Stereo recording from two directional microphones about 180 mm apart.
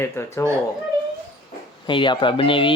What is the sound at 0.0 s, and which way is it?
Speech, 15° left (ahead or behind).